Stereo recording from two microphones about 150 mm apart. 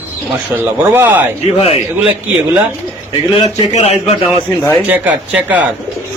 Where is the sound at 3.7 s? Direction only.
45° left (ahead or behind).